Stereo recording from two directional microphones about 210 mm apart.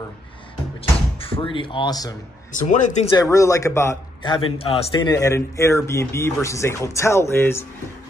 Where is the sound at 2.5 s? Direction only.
35° left (ahead or behind).